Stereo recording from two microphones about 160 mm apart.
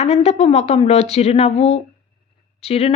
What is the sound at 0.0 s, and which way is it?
Speech, 40° left (ahead or behind).